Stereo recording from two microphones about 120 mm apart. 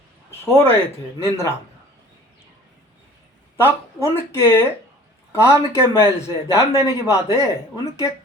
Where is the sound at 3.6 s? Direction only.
25° left (ahead or behind).